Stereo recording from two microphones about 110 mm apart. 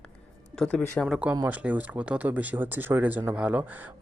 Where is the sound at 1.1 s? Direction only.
10° right (ahead or behind).